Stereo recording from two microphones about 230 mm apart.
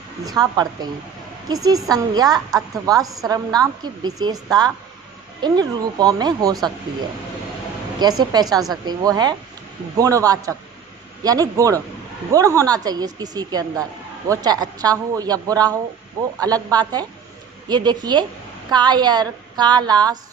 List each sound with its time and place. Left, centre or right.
0.3 s a woman's voice: centre
7.9 s a woman's voice: centre